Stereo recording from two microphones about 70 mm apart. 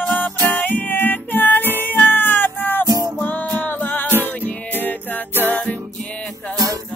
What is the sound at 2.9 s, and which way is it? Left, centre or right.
Music, right.